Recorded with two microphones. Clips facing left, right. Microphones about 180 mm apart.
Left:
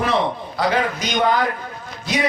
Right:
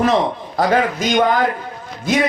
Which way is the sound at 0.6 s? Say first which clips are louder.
Right 4 dB; 45° right (ahead or behind).